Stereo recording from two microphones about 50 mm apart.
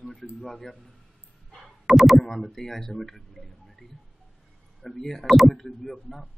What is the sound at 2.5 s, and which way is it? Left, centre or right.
A man's voice, centre.